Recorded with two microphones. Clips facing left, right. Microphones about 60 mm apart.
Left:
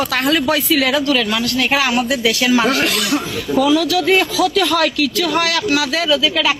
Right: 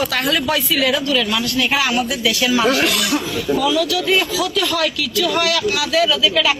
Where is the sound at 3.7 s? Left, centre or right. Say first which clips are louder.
Left 3 dB; left.